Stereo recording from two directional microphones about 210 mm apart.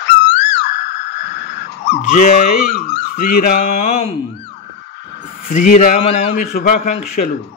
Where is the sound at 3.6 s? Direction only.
30° left (ahead or behind).